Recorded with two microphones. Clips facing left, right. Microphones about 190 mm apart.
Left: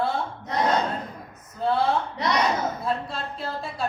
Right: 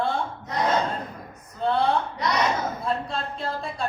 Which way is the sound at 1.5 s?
5° left (ahead or behind).